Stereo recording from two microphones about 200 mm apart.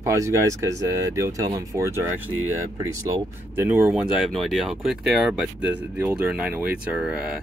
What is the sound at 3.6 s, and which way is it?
Speech, 10° right (ahead or behind).